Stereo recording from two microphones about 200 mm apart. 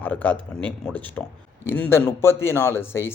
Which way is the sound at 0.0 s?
5° left (ahead or behind).